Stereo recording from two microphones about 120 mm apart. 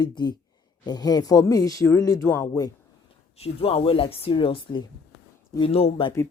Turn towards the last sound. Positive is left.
turn(degrees=50)  # may be behind; listen again after turning